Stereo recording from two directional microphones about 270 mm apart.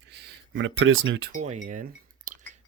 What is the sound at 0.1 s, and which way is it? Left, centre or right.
Speech, right.